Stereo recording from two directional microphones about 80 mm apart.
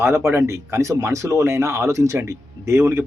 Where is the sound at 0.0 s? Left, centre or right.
Right.